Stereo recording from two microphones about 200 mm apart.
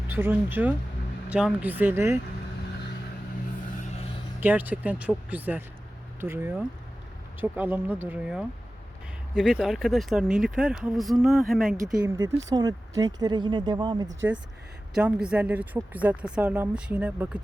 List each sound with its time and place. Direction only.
0.1 s speech: 10° right (ahead or behind)
4.4 s speech: 10° right (ahead or behind)
12.0 s speech: 15° right (ahead or behind)
14.9 s speech: 5° right (ahead or behind)